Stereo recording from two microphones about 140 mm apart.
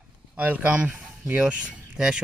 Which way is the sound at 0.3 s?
10° right (ahead or behind).